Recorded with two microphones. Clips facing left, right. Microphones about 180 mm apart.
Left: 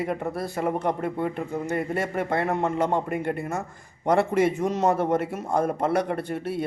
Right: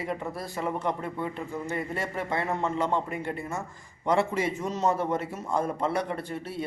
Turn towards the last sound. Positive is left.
turn(degrees=55)  # may be behind; listen again after turning